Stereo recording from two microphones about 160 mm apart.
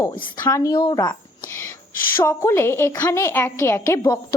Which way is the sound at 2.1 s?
15° left (ahead or behind).